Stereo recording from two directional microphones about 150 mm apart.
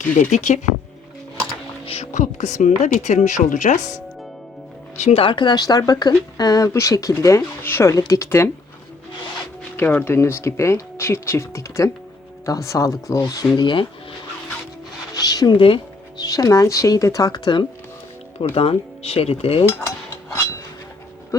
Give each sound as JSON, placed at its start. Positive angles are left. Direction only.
{"t": 0.1, "sound": "speech", "side_deg": 55}
{"t": 1.8, "sound": "speech", "side_deg": 45}
{"t": 4.9, "sound": "speech", "side_deg": 45}
{"t": 9.7, "sound": "speech", "side_deg": 15}
{"t": 15.1, "sound": "speech", "side_deg": 25}
{"t": 18.5, "sound": "speech", "side_deg": 40}